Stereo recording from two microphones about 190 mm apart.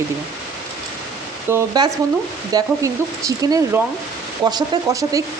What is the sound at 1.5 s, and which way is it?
Speech, 10° right (ahead or behind).